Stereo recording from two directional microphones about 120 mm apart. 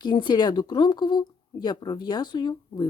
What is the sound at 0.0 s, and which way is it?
Speech, 40° left (ahead or behind).